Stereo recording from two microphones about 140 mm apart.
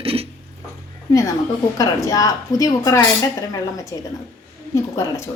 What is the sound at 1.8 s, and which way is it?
A woman's voice, 25° left (ahead or behind).